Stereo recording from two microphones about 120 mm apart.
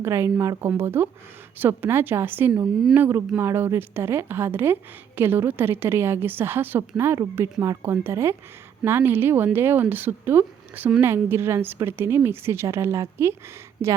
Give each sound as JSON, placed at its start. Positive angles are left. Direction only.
{"t": 0.0, "sound": "a woman's voice", "side_deg": -20}